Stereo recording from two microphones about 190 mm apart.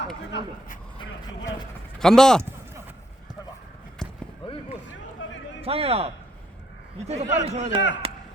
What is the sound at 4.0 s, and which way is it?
Basketball bounce, 5° left (ahead or behind).